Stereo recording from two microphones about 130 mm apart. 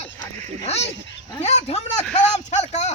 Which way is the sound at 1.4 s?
60° left (ahead or behind).